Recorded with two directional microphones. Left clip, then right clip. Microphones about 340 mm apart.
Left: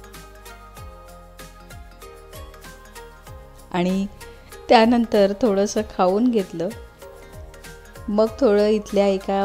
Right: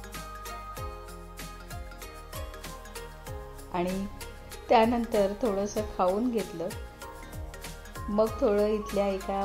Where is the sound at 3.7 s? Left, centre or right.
Left.